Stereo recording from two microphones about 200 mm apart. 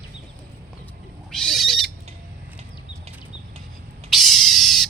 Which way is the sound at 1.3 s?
Centre (ahead or behind).